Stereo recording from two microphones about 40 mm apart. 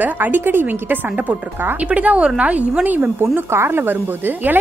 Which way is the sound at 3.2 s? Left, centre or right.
Right.